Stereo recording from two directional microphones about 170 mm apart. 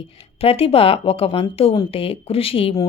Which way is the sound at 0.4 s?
35° left (ahead or behind).